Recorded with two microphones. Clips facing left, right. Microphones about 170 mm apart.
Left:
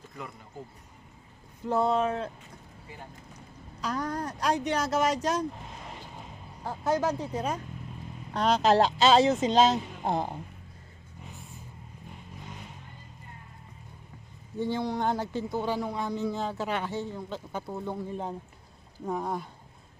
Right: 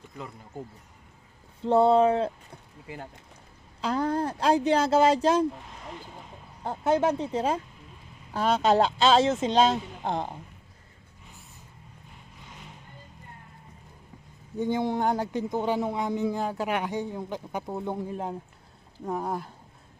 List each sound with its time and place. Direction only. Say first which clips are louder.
1.6 s speech: right 6 dB; 30° right (ahead or behind)
3.8 s speech: right 5 dB; 30° right (ahead or behind)
6.7 s speech: right 4 dB; 20° right (ahead or behind)
8.3 s speech: even; 5° right (ahead or behind)
14.6 s speech: right 3 dB; 15° right (ahead or behind)
18.1 s speech: right 2 dB; 5° right (ahead or behind)